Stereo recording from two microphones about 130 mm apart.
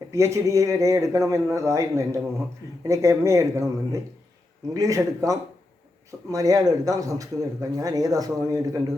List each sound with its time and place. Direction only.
0.1 s speech: 20° right (ahead or behind)